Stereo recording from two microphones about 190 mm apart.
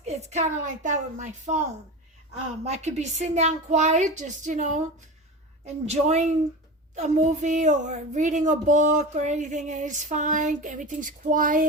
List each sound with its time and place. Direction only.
0.0 s speech: 35° right (ahead or behind)
2.6 s speech: 35° right (ahead or behind)